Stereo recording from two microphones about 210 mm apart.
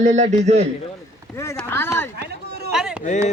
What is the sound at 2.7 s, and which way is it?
Chop, 5° right (ahead or behind).